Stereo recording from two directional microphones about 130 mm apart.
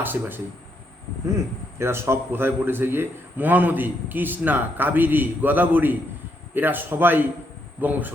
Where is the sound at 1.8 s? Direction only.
20° right (ahead or behind).